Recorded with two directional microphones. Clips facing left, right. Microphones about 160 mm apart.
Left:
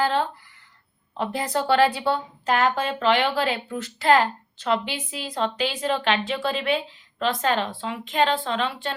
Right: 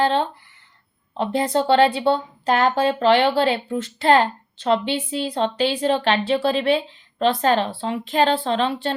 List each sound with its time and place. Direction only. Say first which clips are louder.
0.0 s speech: right 3 dB; 25° right (ahead or behind)